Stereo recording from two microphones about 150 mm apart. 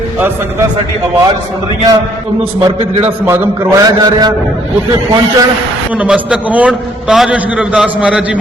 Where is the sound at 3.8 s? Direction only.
25° right (ahead or behind).